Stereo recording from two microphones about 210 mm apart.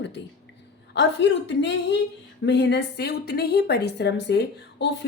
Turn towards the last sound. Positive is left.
turn(degrees=55)  # may be behind; listen again after turning